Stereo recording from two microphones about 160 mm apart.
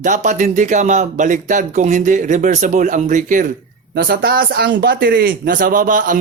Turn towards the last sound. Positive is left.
turn(degrees=-55)  # may be behind; listen again after turning